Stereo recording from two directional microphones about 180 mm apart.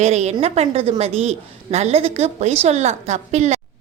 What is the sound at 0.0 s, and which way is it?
A woman's voice, 40° right (ahead or behind).